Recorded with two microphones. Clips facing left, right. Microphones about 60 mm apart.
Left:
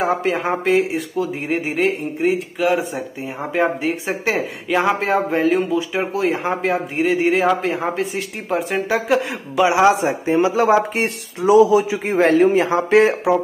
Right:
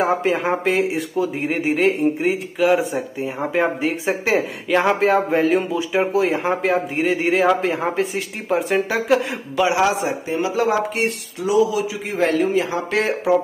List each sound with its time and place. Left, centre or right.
0.0 s speech: centre
9.7 s speech: left